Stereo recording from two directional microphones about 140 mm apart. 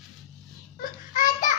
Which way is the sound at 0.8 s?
75° left (ahead or behind).